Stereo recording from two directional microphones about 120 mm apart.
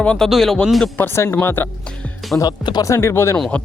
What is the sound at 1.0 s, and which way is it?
Speech, 20° left (ahead or behind).